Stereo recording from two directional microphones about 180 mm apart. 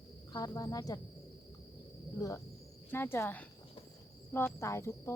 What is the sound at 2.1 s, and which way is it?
Speech, 20° left (ahead or behind).